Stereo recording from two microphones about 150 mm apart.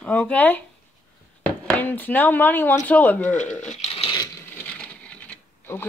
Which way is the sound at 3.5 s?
50° left (ahead or behind).